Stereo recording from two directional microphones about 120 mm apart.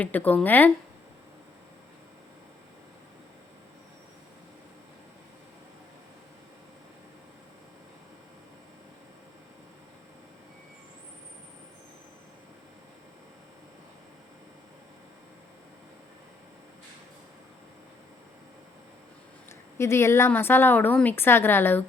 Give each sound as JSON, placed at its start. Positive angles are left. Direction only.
{"t": 0.0, "sound": "a woman's voice", "side_deg": 15}
{"t": 19.8, "sound": "a woman's voice", "side_deg": 20}